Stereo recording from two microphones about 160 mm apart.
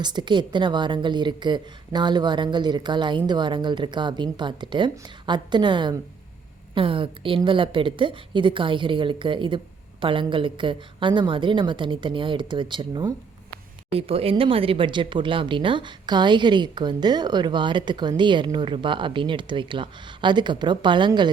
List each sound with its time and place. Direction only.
0.0 s a woman's voice: 25° right (ahead or behind)